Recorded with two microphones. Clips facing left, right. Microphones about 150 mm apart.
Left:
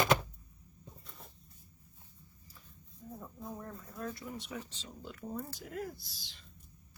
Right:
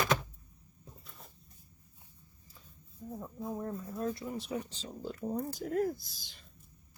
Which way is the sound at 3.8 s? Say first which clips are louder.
Right 3 dB; 25° right (ahead or behind).